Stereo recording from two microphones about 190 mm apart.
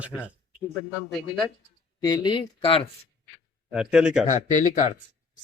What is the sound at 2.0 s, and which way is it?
Speech, 25° left (ahead or behind).